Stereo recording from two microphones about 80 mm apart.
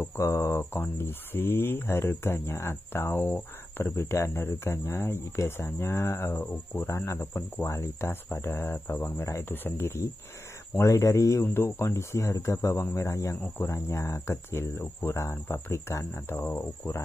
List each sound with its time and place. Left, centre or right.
0.0 s speech: left
3.9 s speech: left
10.8 s speech: left
11.4 s speech: left